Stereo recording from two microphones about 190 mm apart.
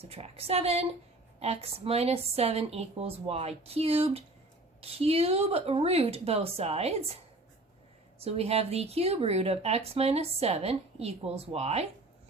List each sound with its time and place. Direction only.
0.0 s speech: 30° right (ahead or behind)
8.2 s speech: 30° right (ahead or behind)